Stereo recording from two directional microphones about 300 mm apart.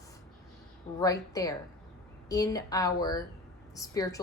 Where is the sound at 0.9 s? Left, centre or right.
Centre.